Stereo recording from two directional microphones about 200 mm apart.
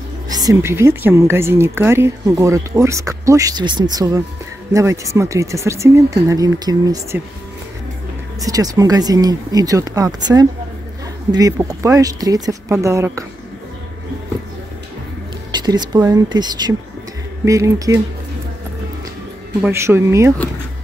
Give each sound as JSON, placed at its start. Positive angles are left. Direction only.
{"t": 0.3, "sound": "speech", "side_deg": -20}
{"t": 8.4, "sound": "speech", "side_deg": -20}
{"t": 15.5, "sound": "speech", "side_deg": -20}
{"t": 19.6, "sound": "speech", "side_deg": -10}